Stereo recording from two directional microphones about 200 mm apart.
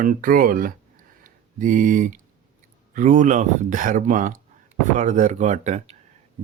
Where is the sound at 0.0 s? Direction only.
45° right (ahead or behind).